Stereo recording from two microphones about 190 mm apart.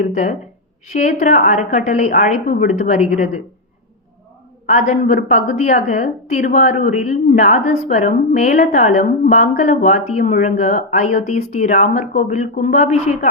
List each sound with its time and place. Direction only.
0.1 s a woman's voice: 40° left (ahead or behind)
4.7 s a woman's voice: 40° left (ahead or behind)